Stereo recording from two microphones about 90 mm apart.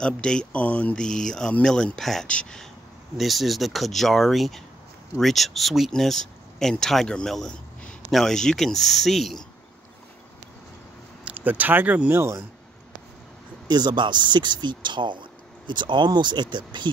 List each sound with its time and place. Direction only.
0.0 s speech: 10° left (ahead or behind)
11.2 s speech: 20° right (ahead or behind)
13.7 s speech: 50° right (ahead or behind)